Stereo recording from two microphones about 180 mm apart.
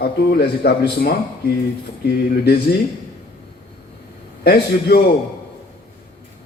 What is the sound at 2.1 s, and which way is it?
Speech, 60° left (ahead or behind).